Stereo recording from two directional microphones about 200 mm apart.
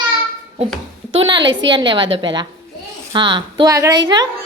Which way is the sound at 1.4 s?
70° right (ahead or behind).